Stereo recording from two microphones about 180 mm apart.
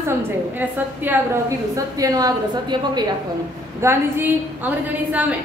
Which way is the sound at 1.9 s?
20° right (ahead or behind).